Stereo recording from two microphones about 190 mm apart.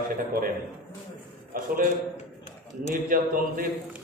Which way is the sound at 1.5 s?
50° right (ahead or behind).